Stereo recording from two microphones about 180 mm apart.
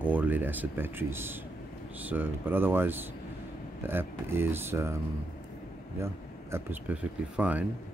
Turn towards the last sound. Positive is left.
turn(degrees=-5)  # may be behind; listen again after turning